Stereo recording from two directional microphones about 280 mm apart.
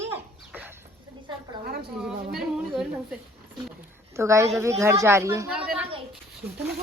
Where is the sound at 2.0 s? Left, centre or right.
Centre.